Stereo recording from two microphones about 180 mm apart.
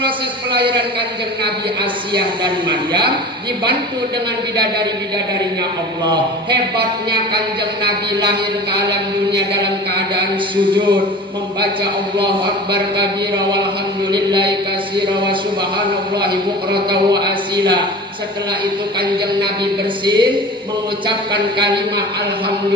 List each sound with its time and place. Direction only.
1.8 s a man's voice: 25° right (ahead or behind)
6.1 s a man's voice: 25° right (ahead or behind)
10.6 s a man's voice: 25° right (ahead or behind)
14.1 s a man's voice: 25° right (ahead or behind)
20.1 s a man's voice: 25° right (ahead or behind)